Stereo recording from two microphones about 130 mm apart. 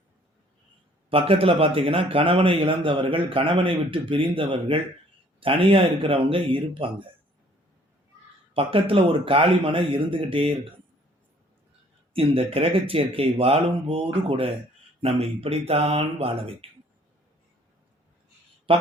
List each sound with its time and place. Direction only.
1.1 s a man's voice: 45° right (ahead or behind)
8.5 s a man's voice: 45° right (ahead or behind)
12.1 s a man's voice: 45° right (ahead or behind)
18.7 s speech: 45° right (ahead or behind)